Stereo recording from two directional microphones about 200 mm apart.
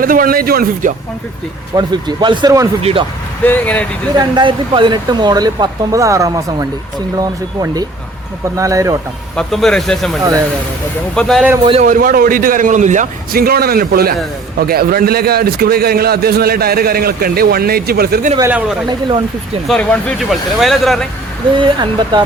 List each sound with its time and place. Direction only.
0.0 s a man's voice: 45° right (ahead or behind)
1.7 s speech: 20° right (ahead or behind)
3.4 s speech: 10° left (ahead or behind)
4.1 s speech: 20° right (ahead or behind)
9.3 s speech: 5° left (ahead or behind)
10.2 s speech: 15° right (ahead or behind)
11.1 s speech: centre (ahead or behind)
11.6 s speech: 30° right (ahead or behind)
11.9 s a man's voice: 45° right (ahead or behind)
18.3 s speech: 10° right (ahead or behind)
18.9 s speech: 25° right (ahead or behind)
19.6 s speech: 5° left (ahead or behind)
21.6 s speech: 20° right (ahead or behind)